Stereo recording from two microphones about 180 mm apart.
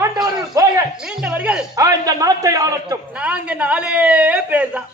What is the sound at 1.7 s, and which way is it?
A man's voice, 20° right (ahead or behind).